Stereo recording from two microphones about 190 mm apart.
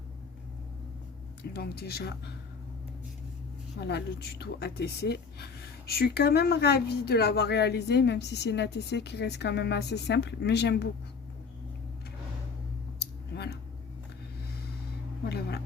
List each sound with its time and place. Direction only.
1.5 s speech: 55° left (ahead or behind)
3.8 s speech: 60° left (ahead or behind)
13.3 s speech: 60° left (ahead or behind)
15.3 s a sound: 60° left (ahead or behind)